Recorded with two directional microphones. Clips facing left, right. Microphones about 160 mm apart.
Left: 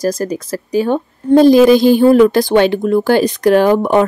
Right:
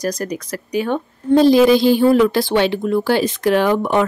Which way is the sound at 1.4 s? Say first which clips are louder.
Left 4 dB; 50° left (ahead or behind).